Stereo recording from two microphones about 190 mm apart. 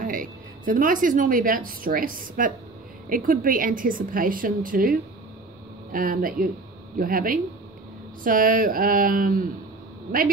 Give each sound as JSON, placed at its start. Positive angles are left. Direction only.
{"t": 0.0, "sound": "a woman's voice", "side_deg": -45}